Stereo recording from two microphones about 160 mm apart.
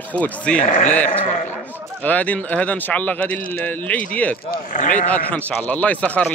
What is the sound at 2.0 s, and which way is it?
Speech, 10° left (ahead or behind).